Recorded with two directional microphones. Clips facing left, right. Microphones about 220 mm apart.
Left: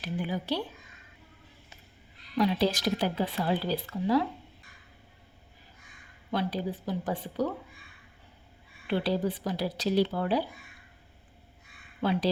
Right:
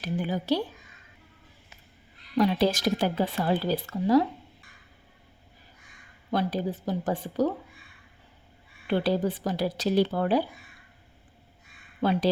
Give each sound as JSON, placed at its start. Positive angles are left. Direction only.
{"t": 0.0, "sound": "speech", "side_deg": -40}
{"t": 2.4, "sound": "speech", "side_deg": -50}
{"t": 6.3, "sound": "speech", "side_deg": -45}
{"t": 8.9, "sound": "speech", "side_deg": -50}